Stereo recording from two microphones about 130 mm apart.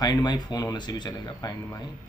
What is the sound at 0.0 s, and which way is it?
Speech, 30° left (ahead or behind).